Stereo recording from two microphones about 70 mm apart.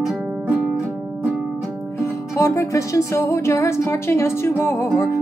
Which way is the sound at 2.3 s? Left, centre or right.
Left.